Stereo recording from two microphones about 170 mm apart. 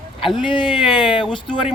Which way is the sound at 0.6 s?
Centre (ahead or behind).